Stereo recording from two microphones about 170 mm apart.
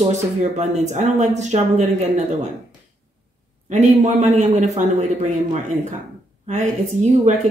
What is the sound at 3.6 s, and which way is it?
A man's voice, 45° right (ahead or behind).